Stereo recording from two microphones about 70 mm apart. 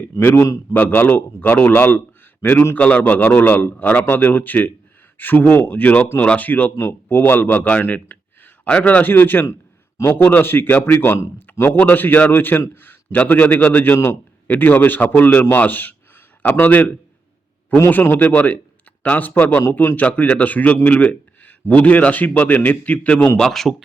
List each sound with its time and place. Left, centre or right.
0.2 s a man's voice: left
23.4 s a man's voice: centre